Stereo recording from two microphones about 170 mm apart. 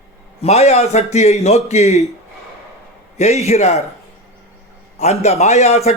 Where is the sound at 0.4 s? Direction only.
40° left (ahead or behind).